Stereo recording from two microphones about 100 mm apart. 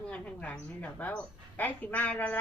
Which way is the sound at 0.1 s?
15° left (ahead or behind).